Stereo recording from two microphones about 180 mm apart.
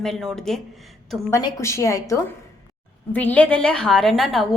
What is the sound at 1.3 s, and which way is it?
A woman's voice, 20° left (ahead or behind).